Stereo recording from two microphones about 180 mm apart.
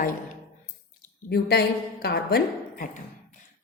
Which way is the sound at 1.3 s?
65° left (ahead or behind).